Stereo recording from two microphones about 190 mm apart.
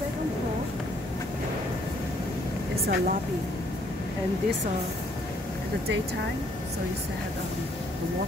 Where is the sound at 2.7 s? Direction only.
55° right (ahead or behind).